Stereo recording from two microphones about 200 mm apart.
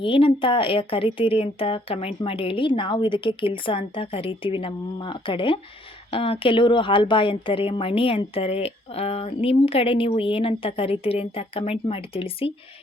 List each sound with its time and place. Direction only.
0.0 s a woman's voice: 25° left (ahead or behind)